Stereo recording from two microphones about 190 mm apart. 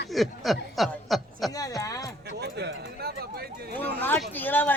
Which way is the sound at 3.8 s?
10° left (ahead or behind).